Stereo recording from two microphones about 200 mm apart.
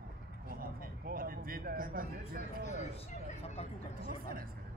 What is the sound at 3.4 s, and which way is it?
Vehicle, 30° left (ahead or behind).